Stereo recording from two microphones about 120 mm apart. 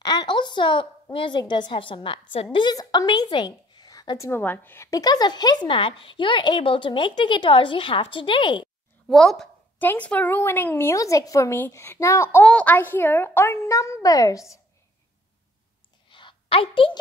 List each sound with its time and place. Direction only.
0.0 s a woman's voice: 35° left (ahead or behind)
4.3 s a woman's voice: 15° left (ahead or behind)
4.9 s speech: 35° left (ahead or behind)
9.0 s a woman's voice: centre (ahead or behind)
9.8 s a woman's voice: 15° left (ahead or behind)
12.4 s a woman's voice: 10° left (ahead or behind); by 14.5 s 30° left (ahead or behind)
16.1 s a sound: 45° left (ahead or behind)